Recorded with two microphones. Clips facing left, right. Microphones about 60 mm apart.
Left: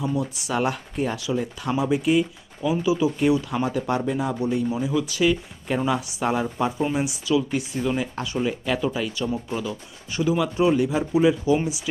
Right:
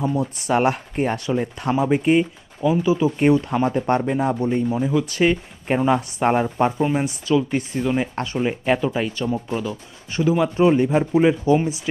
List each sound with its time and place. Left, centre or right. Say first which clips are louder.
0.0 s speech: right 3 dB; right
9.5 s speech: right 3 dB; centre
10.1 s speech: right 3 dB; right